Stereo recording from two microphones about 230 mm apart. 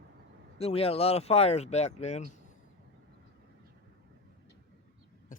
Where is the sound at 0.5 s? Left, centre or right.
Left.